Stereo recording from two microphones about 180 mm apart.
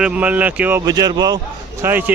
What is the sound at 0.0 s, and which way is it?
Speech, 5° right (ahead or behind).